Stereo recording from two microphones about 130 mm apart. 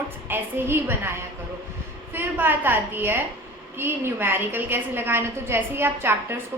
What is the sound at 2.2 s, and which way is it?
A woman's voice, 15° right (ahead or behind).